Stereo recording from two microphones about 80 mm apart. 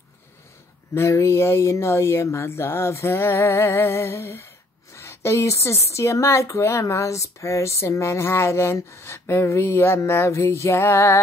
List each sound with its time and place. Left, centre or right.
0.9 s a woman's voice: left